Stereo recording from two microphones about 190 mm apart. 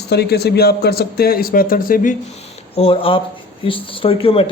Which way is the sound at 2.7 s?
30° left (ahead or behind).